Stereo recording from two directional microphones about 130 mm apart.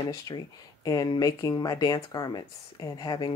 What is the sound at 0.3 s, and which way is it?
Speech, 30° left (ahead or behind).